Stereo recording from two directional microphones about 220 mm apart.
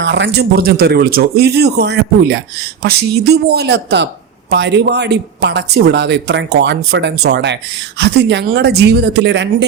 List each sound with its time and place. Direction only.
0.0 s speech: 50° right (ahead or behind)